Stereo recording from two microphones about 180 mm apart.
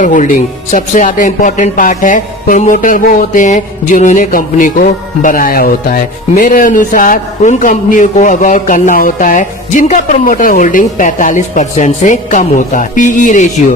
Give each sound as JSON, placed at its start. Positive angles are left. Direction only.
{"t": 0.0, "sound": "speech", "side_deg": 45}